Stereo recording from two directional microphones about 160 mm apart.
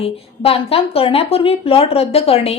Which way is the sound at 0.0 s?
35° left (ahead or behind).